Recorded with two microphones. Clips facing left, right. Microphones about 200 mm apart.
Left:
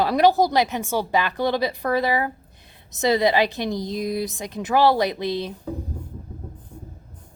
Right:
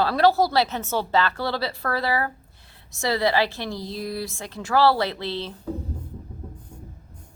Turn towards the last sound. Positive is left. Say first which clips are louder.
# left 4 dB
turn(degrees=15)  # may be behind; listen again after turning